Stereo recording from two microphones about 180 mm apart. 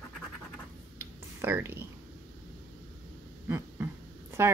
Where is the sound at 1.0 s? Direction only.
15° right (ahead or behind).